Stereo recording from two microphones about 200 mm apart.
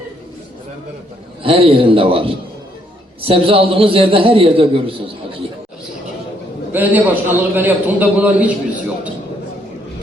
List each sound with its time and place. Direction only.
1.5 s a man's voice: 25° right (ahead or behind)
6.7 s a man's voice: 10° right (ahead or behind)